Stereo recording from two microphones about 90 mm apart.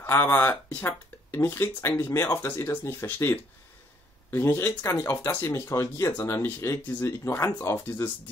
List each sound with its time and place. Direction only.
0.0 s speech: 25° left (ahead or behind)
6.1 s speech: 25° left (ahead or behind)